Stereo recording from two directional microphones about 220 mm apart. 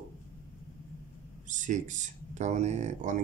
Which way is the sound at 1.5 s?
35° right (ahead or behind).